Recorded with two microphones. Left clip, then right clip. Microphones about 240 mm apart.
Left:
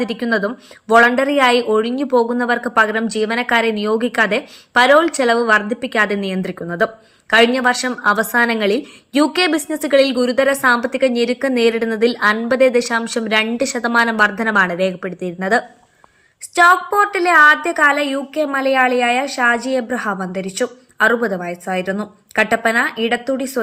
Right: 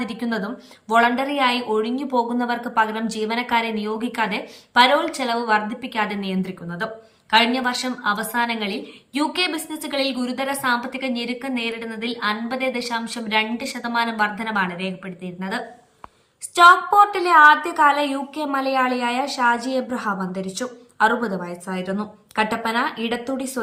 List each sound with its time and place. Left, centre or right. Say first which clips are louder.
0.0 s a woman's voice: left 8 dB; centre